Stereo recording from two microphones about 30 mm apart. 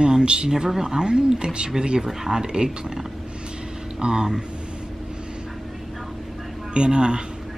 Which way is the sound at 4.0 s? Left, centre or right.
Right.